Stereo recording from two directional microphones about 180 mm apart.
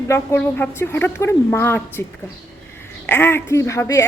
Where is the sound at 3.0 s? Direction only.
10° left (ahead or behind).